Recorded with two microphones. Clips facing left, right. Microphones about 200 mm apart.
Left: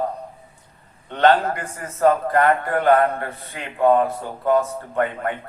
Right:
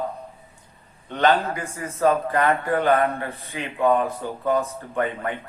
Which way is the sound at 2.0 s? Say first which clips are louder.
Left 3 dB; 50° left (ahead or behind).